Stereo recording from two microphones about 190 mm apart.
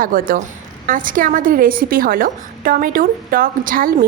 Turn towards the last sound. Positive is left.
turn(degrees=-45)  # may be behind; listen again after turning